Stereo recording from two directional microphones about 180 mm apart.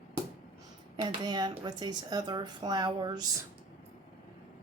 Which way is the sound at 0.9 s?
25° right (ahead or behind).